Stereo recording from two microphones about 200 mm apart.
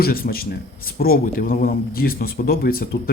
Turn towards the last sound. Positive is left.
turn(degrees=50)  # may be behind; listen again after turning